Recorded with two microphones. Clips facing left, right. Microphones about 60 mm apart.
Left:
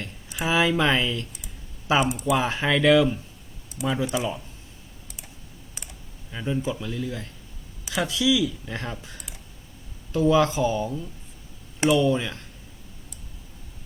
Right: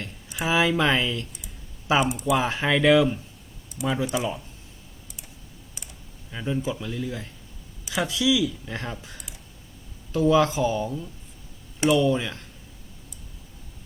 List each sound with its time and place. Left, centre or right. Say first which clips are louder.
0.0 s speech: even; centre
6.3 s speech: even; centre